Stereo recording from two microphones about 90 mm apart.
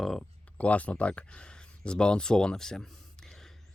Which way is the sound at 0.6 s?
15° left (ahead or behind).